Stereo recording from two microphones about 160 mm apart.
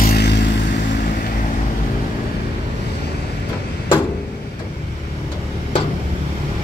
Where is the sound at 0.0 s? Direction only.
80° left.